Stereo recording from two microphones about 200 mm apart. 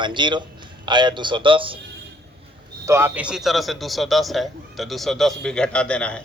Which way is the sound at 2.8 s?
10° right (ahead or behind).